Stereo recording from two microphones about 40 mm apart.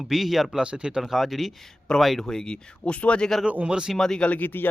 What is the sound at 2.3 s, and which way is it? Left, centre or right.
Speech, centre.